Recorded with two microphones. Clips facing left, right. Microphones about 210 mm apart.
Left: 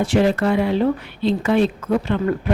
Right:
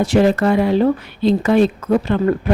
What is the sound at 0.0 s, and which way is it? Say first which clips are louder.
Speech: right 3 dB; 40° right (ahead or behind).